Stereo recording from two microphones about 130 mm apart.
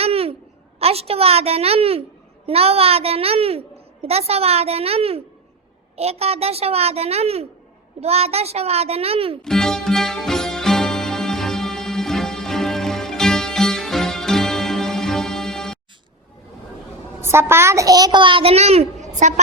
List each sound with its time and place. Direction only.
0.0 s babbling: 50° right (ahead or behind)
0.8 s a child's voice: 50° right (ahead or behind)
9.4 s music: 5° left (ahead or behind)
17.2 s a child's voice: 20° right (ahead or behind); by 19.3 s 65° right (ahead or behind)